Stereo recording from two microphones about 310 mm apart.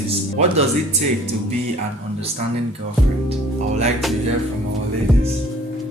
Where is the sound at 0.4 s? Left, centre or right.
Right.